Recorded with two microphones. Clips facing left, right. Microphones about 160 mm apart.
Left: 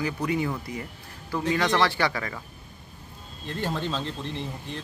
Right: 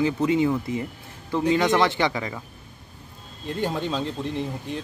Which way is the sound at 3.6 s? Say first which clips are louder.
Right 3 dB; 10° right (ahead or behind).